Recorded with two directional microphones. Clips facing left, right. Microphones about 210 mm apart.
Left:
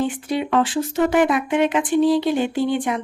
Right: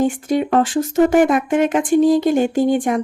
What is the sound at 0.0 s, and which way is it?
Speech, 45° right (ahead or behind).